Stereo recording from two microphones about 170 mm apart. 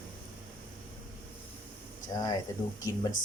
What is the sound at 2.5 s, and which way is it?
Speech, 20° left (ahead or behind).